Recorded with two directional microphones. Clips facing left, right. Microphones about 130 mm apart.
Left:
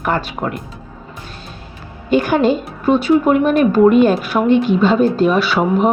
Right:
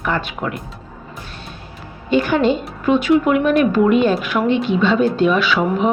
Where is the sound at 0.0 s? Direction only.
45° left (ahead or behind).